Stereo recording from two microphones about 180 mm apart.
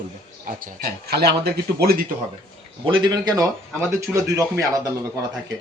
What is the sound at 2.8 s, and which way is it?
Speech, 25° right (ahead or behind).